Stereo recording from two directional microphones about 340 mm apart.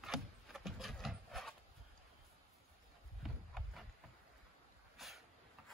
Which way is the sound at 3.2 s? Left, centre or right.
Centre.